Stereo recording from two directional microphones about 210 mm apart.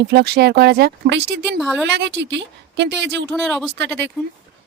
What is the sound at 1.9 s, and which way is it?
A woman's voice, 55° right (ahead or behind).